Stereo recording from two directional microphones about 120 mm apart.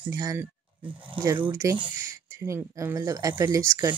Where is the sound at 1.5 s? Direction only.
25° right (ahead or behind).